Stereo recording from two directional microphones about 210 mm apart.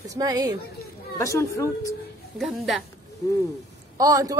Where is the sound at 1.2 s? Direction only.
15° left (ahead or behind).